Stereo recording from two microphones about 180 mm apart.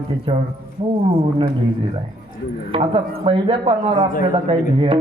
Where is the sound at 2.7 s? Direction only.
30° right (ahead or behind).